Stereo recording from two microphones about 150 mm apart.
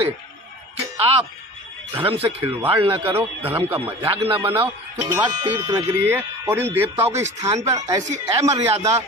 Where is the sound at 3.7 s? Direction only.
15° right (ahead or behind).